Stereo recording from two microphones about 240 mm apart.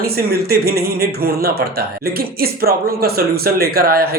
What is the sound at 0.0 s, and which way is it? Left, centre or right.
Speech, right.